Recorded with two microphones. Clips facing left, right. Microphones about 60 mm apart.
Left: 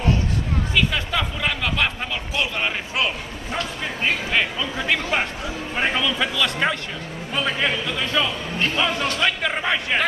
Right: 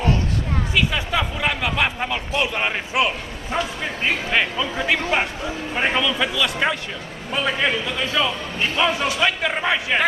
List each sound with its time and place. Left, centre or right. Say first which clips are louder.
0.7 s a man's voice: right 1 dB; centre